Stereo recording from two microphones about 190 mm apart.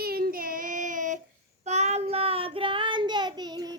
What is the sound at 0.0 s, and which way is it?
Child singing, 55° right (ahead or behind).